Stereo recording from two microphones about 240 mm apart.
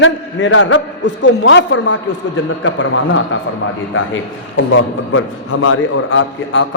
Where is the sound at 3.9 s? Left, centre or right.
Left.